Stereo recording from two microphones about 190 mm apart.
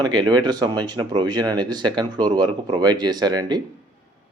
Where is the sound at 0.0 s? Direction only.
20° right (ahead or behind).